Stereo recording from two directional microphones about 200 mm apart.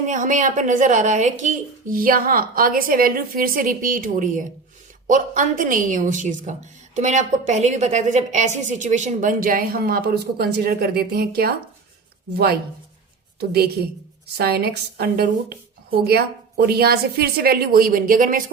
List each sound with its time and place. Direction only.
0.1 s a woman's voice: 40° right (ahead or behind)
13.4 s speech: 55° right (ahead or behind)